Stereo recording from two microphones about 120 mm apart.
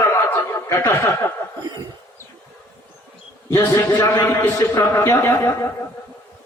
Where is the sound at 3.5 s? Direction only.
25° left (ahead or behind).